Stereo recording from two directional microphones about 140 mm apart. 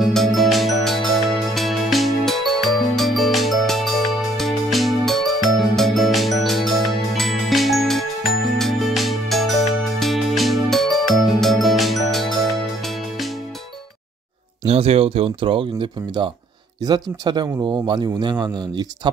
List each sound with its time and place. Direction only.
0.0 s music: centre (ahead or behind)
14.6 s a man's voice: 45° right (ahead or behind); by 18.9 s 30° right (ahead or behind)